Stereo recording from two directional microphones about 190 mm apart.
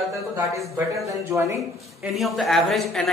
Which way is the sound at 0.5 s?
15° right (ahead or behind).